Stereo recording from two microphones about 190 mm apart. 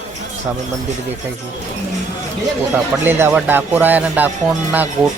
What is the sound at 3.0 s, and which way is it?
Speech, 10° right (ahead or behind).